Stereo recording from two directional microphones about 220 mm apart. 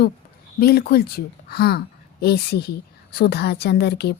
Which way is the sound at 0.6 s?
45° left (ahead or behind).